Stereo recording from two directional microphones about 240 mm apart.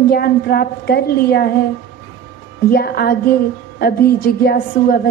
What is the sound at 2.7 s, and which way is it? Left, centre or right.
Speech, left.